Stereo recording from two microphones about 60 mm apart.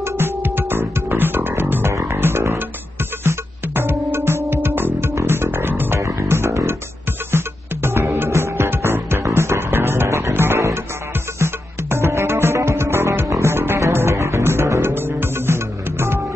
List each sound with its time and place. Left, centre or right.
0.0 s music: right